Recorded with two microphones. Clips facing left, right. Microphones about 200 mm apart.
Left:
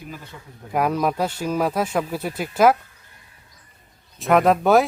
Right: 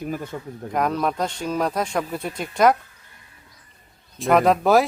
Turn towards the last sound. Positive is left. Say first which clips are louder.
# left 1 dB
turn(degrees=0)  # may be behind; listen again after turning